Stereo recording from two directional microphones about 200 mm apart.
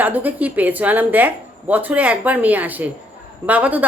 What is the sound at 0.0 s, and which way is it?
Speech, 10° right (ahead or behind).